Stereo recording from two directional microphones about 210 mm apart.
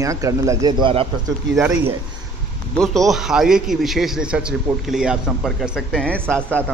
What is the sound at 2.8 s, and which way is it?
A man's voice, centre (ahead or behind).